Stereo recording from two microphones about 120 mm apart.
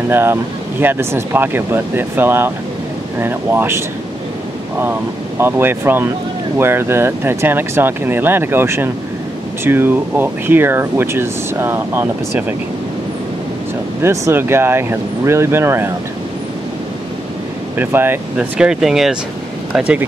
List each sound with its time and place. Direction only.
0.1 s speech: 15° right (ahead or behind)
5.4 s speech: 15° right (ahead or behind)
14.0 s speech: 20° right (ahead or behind)
17.7 s speech: 15° right (ahead or behind)
18.6 s speech: 5° right (ahead or behind)